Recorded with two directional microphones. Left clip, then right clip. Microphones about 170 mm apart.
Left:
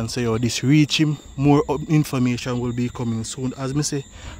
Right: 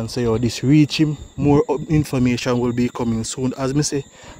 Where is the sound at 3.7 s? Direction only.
20° right (ahead or behind).